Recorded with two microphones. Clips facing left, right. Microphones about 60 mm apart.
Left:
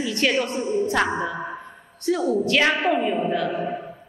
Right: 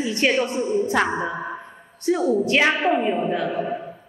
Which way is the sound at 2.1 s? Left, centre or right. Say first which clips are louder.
Right 2 dB; right.